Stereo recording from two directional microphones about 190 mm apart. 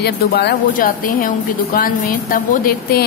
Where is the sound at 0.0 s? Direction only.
60° left (ahead or behind).